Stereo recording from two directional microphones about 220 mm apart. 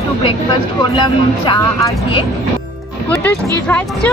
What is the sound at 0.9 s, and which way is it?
Speech, 20° left (ahead or behind).